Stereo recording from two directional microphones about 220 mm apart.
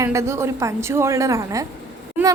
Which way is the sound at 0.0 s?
15° right (ahead or behind).